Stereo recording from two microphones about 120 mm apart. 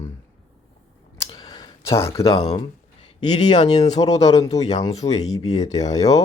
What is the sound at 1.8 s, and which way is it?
Speech, 25° left (ahead or behind).